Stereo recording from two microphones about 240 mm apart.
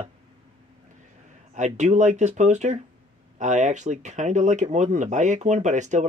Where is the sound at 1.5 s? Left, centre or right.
Right.